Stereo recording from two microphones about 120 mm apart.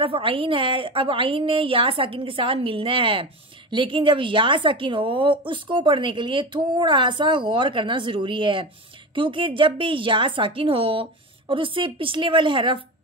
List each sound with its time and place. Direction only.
0.0 s a woman's voice: 50° right (ahead or behind)